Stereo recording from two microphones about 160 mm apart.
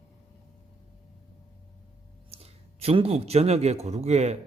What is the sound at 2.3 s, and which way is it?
A man's voice, 40° right (ahead or behind).